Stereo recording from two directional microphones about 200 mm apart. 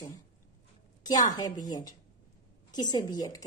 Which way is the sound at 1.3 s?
20° left (ahead or behind).